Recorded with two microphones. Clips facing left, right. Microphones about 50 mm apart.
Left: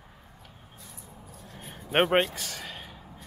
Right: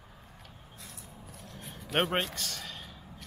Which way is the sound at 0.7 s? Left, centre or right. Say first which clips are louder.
Right 1 dB; right.